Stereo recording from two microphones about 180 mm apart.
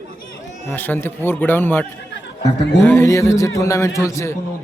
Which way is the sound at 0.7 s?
10° left (ahead or behind).